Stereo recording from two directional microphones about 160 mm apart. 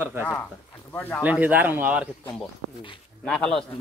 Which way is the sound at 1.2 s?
10° right (ahead or behind).